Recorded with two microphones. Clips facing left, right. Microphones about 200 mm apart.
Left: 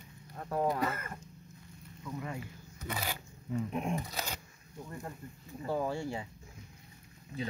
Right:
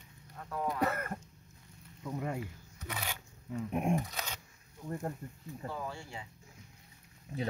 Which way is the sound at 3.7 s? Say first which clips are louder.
Right 7 dB; 50° right (ahead or behind).